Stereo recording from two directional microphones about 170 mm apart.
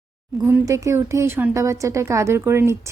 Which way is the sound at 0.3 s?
20° right (ahead or behind).